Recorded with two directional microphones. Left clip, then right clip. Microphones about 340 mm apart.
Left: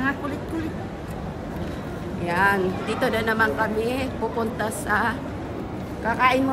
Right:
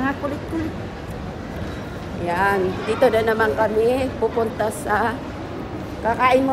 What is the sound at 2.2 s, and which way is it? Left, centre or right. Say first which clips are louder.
A woman's voice: right 1 dB; centre.